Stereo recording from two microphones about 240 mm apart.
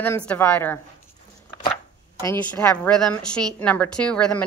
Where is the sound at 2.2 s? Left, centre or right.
Centre.